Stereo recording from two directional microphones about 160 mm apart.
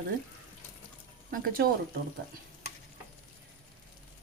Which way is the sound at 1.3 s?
60° right (ahead or behind).